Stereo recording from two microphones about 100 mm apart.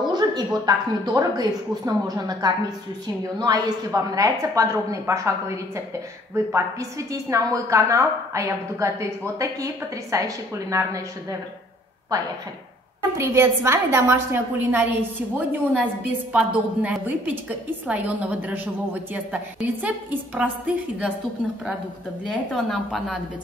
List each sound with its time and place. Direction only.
0.1 s a woman's voice: 45° right (ahead or behind)
6.3 s a woman's voice: 30° right (ahead or behind)
13.2 s a woman's voice: 25° right (ahead or behind)
22.5 s speech: 5° left (ahead or behind)